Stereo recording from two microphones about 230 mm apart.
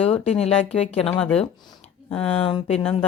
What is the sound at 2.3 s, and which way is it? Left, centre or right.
Speech, left.